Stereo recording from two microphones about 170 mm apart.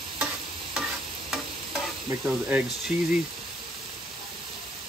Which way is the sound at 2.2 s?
10° right (ahead or behind).